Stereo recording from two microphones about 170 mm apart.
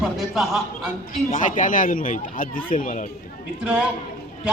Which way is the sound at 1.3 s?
50° left (ahead or behind).